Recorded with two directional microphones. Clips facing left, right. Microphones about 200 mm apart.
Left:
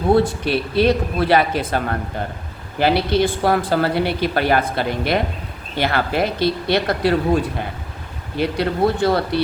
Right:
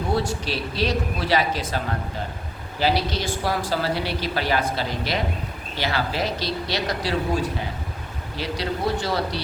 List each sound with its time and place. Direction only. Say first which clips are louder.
0.1 s a woman's voice: left 10 dB; 55° left (ahead or behind)
8.4 s a woman's voice: left 8 dB; 55° left (ahead or behind)